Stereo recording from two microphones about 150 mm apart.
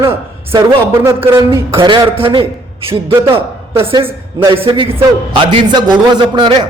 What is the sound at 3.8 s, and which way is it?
A man's voice, 35° right (ahead or behind).